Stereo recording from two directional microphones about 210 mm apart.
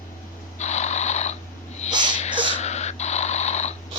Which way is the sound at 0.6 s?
35° left (ahead or behind).